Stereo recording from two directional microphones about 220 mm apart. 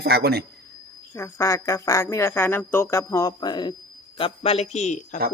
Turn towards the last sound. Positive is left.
turn(degrees=30)  # may be behind; listen again after turning